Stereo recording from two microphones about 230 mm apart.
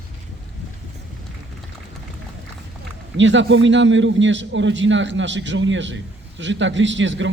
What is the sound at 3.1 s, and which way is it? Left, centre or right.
A man's voice, right.